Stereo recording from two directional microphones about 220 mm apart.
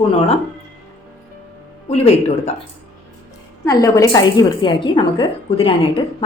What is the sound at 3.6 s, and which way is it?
A woman's voice, 15° left (ahead or behind).